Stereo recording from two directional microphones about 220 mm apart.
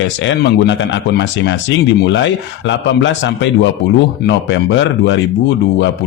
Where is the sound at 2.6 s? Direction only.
55° left (ahead or behind).